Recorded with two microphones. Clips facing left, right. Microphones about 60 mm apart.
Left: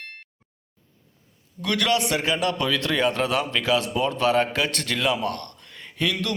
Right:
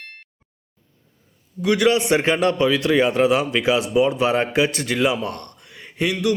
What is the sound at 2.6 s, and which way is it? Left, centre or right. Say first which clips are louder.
A man's voice: right 6 dB; centre.